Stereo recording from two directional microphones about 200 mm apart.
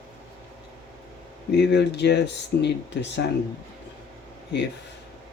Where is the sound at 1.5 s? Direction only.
60° left (ahead or behind).